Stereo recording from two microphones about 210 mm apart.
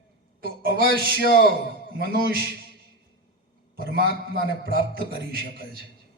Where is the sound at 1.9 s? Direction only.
45° right (ahead or behind).